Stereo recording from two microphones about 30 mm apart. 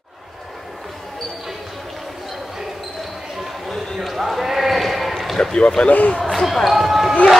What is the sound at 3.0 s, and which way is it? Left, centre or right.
Basketball bounce, centre.